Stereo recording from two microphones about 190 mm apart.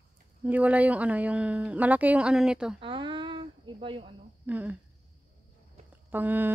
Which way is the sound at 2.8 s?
25° right (ahead or behind).